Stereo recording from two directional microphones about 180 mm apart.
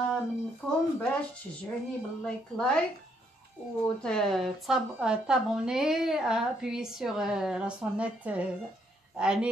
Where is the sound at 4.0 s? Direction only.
5° left (ahead or behind).